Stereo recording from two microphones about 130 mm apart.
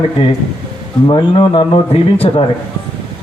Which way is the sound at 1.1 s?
45° left (ahead or behind).